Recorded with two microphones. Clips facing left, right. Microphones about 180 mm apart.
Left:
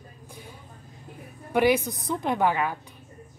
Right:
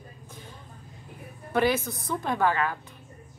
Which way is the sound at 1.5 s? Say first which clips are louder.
Left 3 dB; 15° left (ahead or behind).